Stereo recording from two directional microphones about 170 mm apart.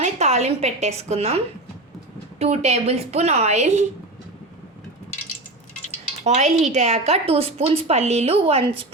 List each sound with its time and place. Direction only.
0.0 s a woman's voice: 40° right (ahead or behind)
2.4 s a woman's voice: 40° right (ahead or behind)
6.2 s a woman's voice: 40° right (ahead or behind)